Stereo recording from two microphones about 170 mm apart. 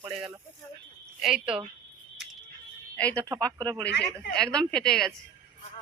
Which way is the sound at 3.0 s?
10° left (ahead or behind).